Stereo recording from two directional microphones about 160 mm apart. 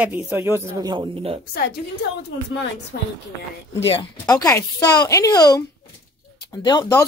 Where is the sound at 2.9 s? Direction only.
65° left (ahead or behind).